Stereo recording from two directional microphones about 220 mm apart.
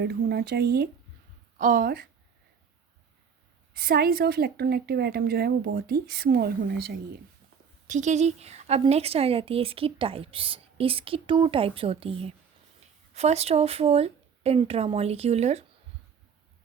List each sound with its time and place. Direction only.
0.0 s a woman's voice: 45° right (ahead or behind)
3.8 s a woman's voice: 45° right (ahead or behind)
7.9 s a woman's voice: 35° right (ahead or behind)